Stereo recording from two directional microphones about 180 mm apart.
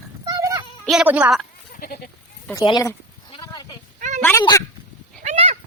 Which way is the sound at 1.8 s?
55° left (ahead or behind).